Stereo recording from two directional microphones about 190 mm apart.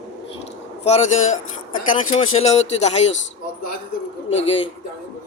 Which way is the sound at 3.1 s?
75° left (ahead or behind).